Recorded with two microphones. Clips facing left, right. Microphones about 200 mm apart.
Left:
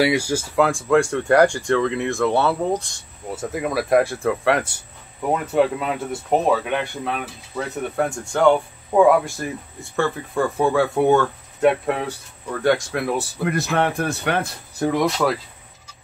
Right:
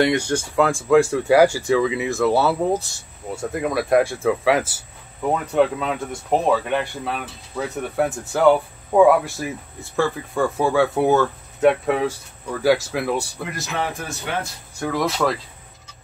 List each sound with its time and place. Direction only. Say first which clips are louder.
0.0 s speech: even; 5° left (ahead or behind)
13.4 s speech: left 6 dB; 60° left (ahead or behind)
15.0 s speech: left 1 dB; centre (ahead or behind)